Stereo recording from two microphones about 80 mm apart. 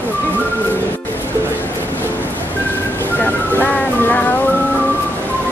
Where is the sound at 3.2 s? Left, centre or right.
Left.